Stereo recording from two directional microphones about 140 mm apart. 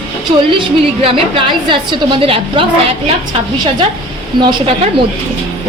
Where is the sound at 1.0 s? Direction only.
40° right (ahead or behind).